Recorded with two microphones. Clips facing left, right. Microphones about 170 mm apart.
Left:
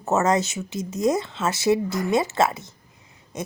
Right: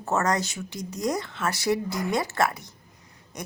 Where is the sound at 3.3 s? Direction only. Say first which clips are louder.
Left 6 dB; 25° left (ahead or behind).